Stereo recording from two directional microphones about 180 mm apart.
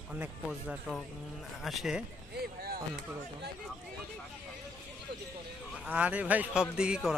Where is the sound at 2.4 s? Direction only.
60° right (ahead or behind).